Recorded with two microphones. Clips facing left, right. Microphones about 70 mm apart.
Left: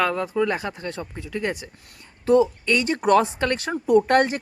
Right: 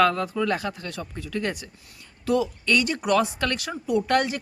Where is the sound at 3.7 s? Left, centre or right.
Left.